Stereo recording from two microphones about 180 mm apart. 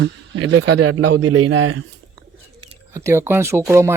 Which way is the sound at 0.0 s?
90° right.